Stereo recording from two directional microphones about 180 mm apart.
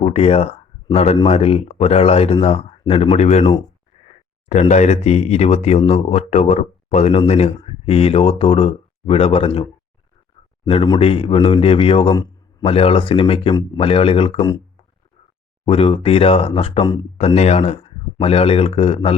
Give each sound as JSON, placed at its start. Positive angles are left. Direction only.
{"t": 0.0, "sound": "speech", "side_deg": 35}
{"t": 4.7, "sound": "speech", "side_deg": 40}
{"t": 10.7, "sound": "speech", "side_deg": 30}
{"t": 15.6, "sound": "speech", "side_deg": 30}